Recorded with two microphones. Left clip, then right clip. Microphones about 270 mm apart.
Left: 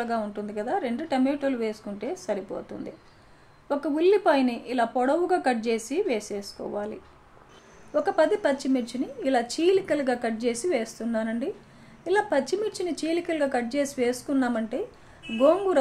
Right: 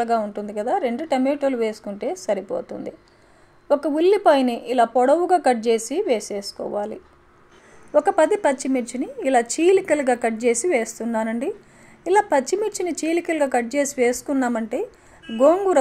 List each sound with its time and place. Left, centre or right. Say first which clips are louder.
0.0 s a woman's voice: right 7 dB; right
7.9 s a woman's voice: right 6 dB; right